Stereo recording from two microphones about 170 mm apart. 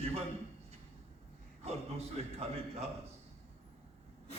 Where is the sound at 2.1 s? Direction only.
35° right (ahead or behind).